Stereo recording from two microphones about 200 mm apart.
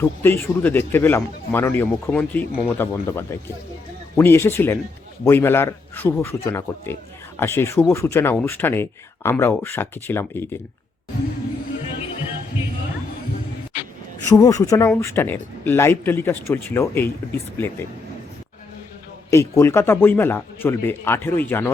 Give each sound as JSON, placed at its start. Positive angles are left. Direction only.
{"t": 0.0, "sound": "speech", "side_deg": 10}
{"t": 14.3, "sound": "speech", "side_deg": 15}
{"t": 19.3, "sound": "speech", "side_deg": 15}